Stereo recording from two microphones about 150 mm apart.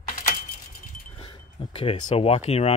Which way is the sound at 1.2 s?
35° left (ahead or behind).